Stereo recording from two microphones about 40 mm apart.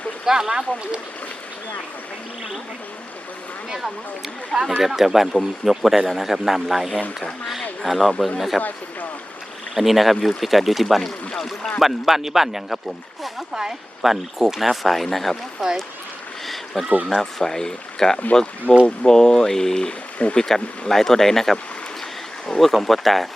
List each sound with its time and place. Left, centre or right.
0.3 s speech: centre
4.8 s speech: centre
9.7 s speech: centre
11.8 s speech: centre
15.6 s speech: centre
16.7 s speech: centre
18.7 s speech: left
19.0 s speech: centre
22.6 s speech: centre